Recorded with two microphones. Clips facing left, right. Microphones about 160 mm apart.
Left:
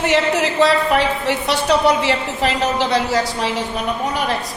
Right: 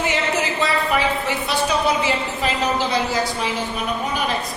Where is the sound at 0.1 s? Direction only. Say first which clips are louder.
Left 5 dB; 75° left (ahead or behind).